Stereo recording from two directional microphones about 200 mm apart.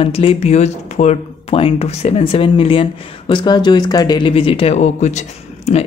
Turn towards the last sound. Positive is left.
turn(degrees=35)  # may be behind; listen again after turning